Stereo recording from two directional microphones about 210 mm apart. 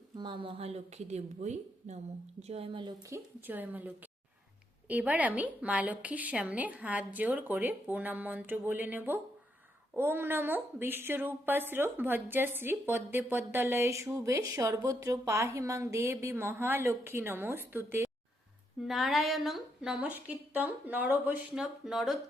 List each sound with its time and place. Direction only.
0.2 s a woman's voice: 25° right (ahead or behind)
3.4 s speech: 10° right (ahead or behind)
18.8 s a woman's voice: centre (ahead or behind)